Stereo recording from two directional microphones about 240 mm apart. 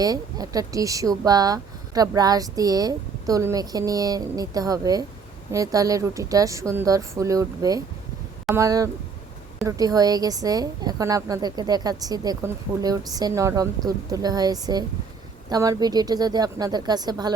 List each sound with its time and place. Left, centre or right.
0.0 s a woman's voice: centre